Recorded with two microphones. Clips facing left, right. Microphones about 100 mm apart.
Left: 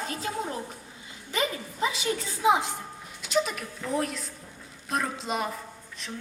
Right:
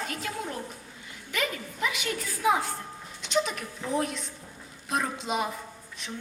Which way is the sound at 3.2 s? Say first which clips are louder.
Left 1 dB; centre (ahead or behind).